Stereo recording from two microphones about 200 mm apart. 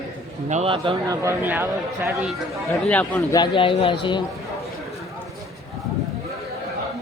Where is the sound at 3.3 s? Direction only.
20° left (ahead or behind).